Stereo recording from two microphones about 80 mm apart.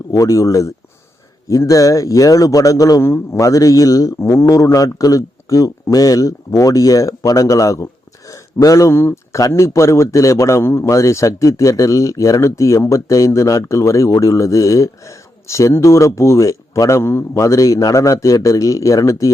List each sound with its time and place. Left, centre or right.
0.1 s a man's voice: left